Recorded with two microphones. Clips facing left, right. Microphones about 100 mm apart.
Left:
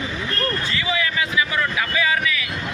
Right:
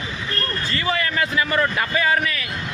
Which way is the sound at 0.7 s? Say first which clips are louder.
Right 1 dB; 50° right (ahead or behind).